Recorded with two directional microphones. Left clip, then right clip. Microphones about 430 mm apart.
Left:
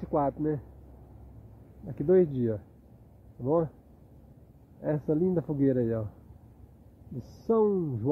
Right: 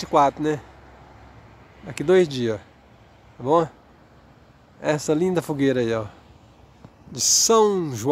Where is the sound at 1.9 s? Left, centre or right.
Centre.